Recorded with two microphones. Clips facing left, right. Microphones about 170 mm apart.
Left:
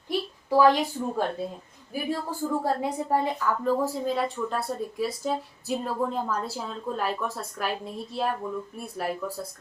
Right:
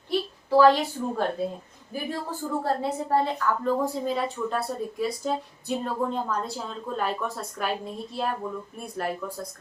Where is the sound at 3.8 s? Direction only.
Centre (ahead or behind).